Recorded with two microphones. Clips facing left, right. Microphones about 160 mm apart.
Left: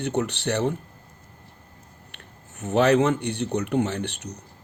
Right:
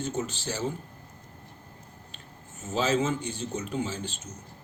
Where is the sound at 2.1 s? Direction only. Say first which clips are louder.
Even; 70° left (ahead or behind).